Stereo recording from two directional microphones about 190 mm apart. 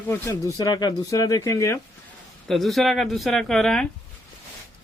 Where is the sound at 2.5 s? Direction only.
Centre (ahead or behind).